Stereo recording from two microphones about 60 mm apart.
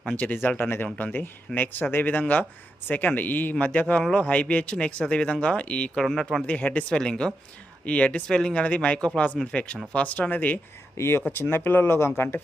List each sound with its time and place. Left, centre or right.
0.4 s speech: left
6.0 s speech: centre
6.5 s speech: left
6.9 s speech: centre
7.9 s speech: left
10.9 s speech: left
11.3 s speech: left